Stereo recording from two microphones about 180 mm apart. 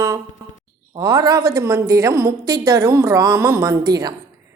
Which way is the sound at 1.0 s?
20° right (ahead or behind).